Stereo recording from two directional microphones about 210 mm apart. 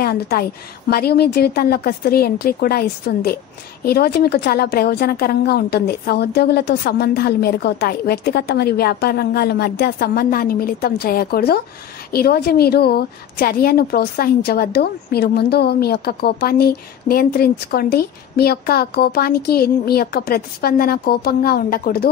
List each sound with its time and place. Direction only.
0.0 s a woman's voice: 45° left (ahead or behind)